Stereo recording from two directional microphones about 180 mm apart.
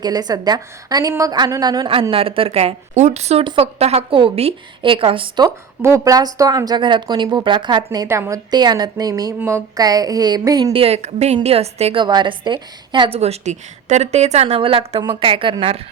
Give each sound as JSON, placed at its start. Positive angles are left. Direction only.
{"t": 0.0, "sound": "a woman's voice", "side_deg": -20}
{"t": 5.5, "sound": "a woman's voice", "side_deg": -15}
{"t": 7.9, "sound": "a woman's voice", "side_deg": -15}